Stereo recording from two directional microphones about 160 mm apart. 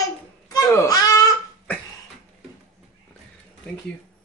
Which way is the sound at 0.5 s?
25° left (ahead or behind).